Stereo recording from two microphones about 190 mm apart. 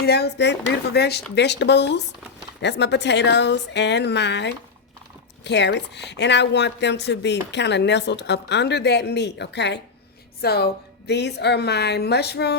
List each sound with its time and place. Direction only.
0.0 s a woman's voice: 60° left (ahead or behind)